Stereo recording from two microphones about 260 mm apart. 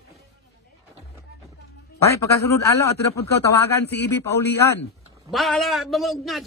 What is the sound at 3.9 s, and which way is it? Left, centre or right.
Speech, left.